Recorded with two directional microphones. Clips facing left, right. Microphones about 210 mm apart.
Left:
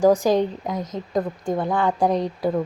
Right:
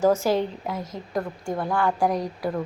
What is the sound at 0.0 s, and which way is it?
A woman's voice, 15° left (ahead or behind).